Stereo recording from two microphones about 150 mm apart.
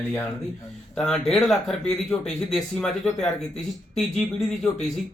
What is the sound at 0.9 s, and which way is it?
Speech, 5° left (ahead or behind).